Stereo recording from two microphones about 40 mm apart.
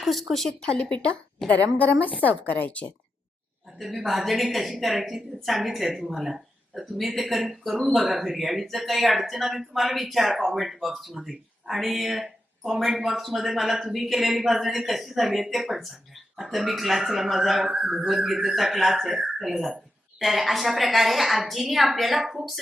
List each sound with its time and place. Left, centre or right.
0.0 s speech: centre
1.5 s a woman's voice: left
4.0 s speech: centre